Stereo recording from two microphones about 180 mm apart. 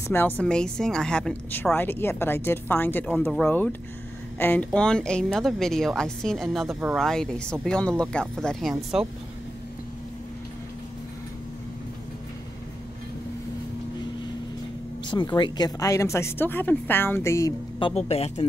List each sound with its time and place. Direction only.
0.1 s a woman's voice: 10° left (ahead or behind)
15.0 s speech: 25° left (ahead or behind)
17.7 s speech: 30° left (ahead or behind)